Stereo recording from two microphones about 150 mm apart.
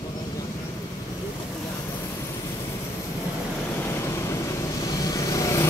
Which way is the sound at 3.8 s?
15° left (ahead or behind).